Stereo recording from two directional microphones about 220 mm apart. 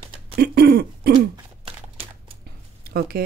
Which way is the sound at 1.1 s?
25° right (ahead or behind).